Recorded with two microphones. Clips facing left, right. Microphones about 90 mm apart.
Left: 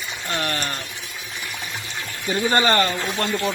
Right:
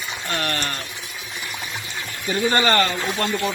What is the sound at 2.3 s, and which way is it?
Speech, 25° left (ahead or behind).